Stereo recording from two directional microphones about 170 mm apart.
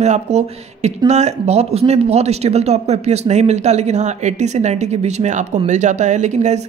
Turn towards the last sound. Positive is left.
turn(degrees=-45)  # may be behind; listen again after turning